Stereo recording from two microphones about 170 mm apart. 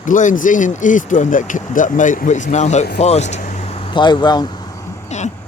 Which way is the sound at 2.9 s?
40° left (ahead or behind).